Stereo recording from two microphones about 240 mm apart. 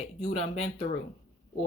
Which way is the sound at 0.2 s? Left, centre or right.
Left.